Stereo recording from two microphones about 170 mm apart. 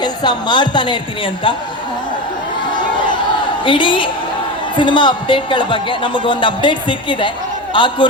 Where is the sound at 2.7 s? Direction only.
25° left (ahead or behind).